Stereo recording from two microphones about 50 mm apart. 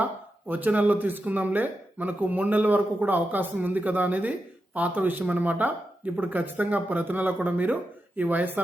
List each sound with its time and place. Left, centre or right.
0.0 s speech: right